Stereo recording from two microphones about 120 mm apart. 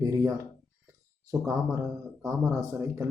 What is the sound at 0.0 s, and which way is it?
Speech, 30° right (ahead or behind).